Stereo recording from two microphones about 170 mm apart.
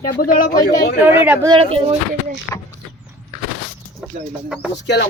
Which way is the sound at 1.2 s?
10° right (ahead or behind).